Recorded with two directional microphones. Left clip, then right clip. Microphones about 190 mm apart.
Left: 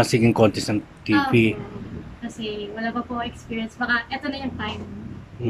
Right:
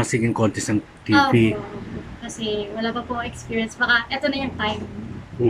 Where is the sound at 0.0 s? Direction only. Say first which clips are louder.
Left 4 dB; 5° left (ahead or behind).